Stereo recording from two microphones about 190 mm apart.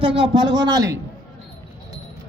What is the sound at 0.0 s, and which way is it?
Speech, 25° right (ahead or behind).